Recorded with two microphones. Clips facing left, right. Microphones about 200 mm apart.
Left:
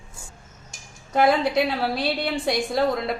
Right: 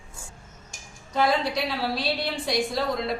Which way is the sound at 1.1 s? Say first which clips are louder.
Left 5 dB; 55° left (ahead or behind).